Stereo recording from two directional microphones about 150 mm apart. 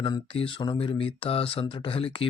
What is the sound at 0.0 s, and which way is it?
Speech, 35° left (ahead or behind).